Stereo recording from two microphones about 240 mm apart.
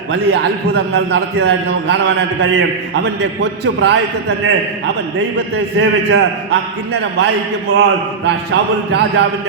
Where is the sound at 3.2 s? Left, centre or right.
Right.